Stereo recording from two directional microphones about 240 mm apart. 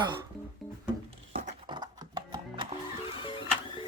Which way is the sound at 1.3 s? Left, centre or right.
Right.